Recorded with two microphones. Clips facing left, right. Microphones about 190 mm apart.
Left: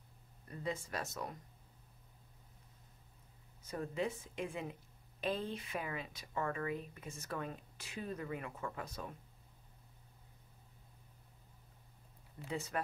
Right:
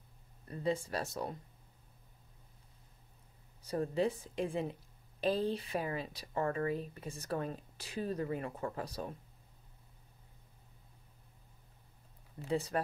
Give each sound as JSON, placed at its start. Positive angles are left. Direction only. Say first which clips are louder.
{"t": 0.5, "sound": "speech", "louder": "right 6 dB", "side_deg": -30}
{"t": 3.6, "sound": "speech", "louder": "right 6 dB", "side_deg": -35}
{"t": 12.4, "sound": "speech", "louder": "right 6 dB", "side_deg": -35}